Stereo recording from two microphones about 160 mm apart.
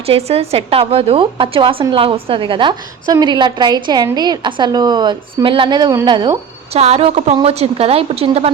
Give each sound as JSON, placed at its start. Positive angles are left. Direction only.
{"t": 0.0, "sound": "a woman's voice", "side_deg": -40}
{"t": 6.7, "sound": "a woman's voice", "side_deg": -40}